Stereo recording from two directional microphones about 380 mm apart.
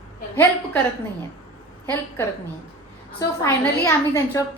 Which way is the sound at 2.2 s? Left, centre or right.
Centre.